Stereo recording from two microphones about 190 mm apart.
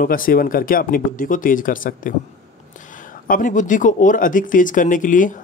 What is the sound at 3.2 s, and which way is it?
A man's voice, 45° left (ahead or behind).